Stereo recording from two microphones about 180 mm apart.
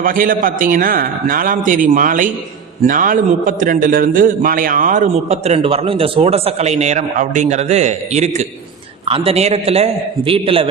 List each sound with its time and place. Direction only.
0.0 s a man's voice: 50° right (ahead or behind); by 10.7 s 30° right (ahead or behind)